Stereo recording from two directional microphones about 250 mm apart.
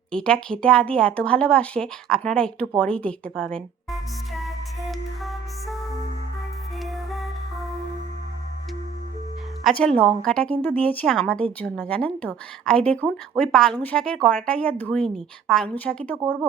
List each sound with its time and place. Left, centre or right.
0.1 s speech: centre
6.8 s music: centre
9.6 s speech: centre
9.9 s a woman's voice: right
10.2 s speech: centre